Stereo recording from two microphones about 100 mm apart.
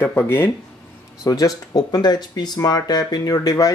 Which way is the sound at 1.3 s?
35° left (ahead or behind).